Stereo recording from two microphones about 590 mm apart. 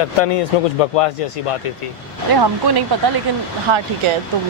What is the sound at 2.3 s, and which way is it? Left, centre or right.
Speech, right.